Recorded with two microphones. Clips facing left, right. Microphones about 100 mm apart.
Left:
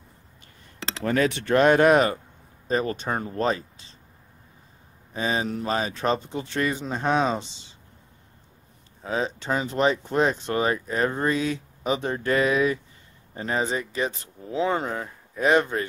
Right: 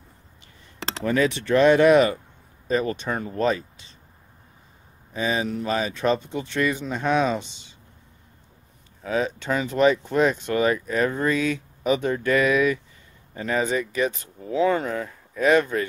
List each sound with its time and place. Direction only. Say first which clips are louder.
1.0 s speech: right 1 dB; 45° left (ahead or behind)
5.1 s speech: right 1 dB; 35° left (ahead or behind)
9.0 s speech: right 2 dB; 25° left (ahead or behind)